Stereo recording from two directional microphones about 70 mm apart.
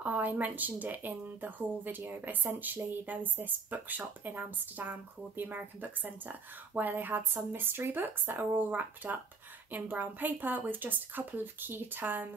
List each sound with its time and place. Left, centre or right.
0.0 s speech: right